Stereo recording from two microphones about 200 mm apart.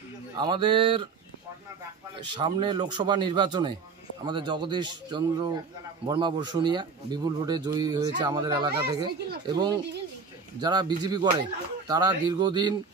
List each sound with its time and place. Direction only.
0.4 s a man's voice: 20° right (ahead or behind)
2.3 s a man's voice: 25° right (ahead or behind)